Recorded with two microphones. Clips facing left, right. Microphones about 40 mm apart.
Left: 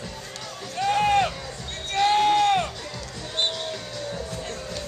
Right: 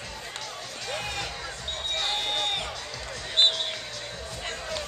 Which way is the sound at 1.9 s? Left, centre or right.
Left.